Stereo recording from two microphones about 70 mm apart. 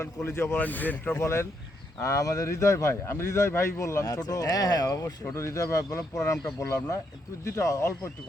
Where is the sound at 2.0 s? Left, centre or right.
Left.